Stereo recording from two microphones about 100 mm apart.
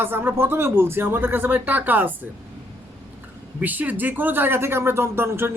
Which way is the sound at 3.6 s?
15° right (ahead or behind).